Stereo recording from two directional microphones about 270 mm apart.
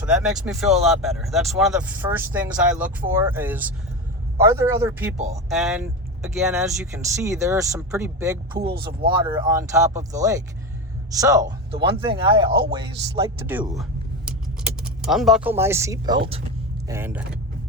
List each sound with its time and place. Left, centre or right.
0.0 s speech: centre
5.1 s speech: right
5.5 s speech: centre
12.5 s speech: right
12.7 s speech: centre